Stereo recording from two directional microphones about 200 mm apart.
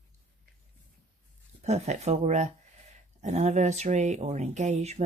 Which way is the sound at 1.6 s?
35° right (ahead or behind).